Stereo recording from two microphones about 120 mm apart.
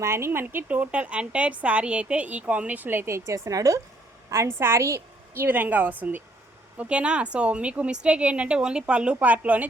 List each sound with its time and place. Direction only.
0.0 s a woman's voice: 20° right (ahead or behind)